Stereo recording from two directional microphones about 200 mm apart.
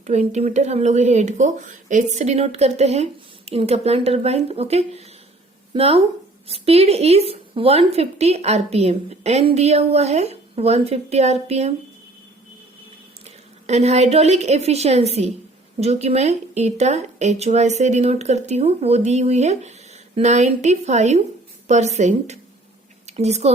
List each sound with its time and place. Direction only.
0.0 s speech: 35° right (ahead or behind)
13.2 s a woman's voice: 35° right (ahead or behind)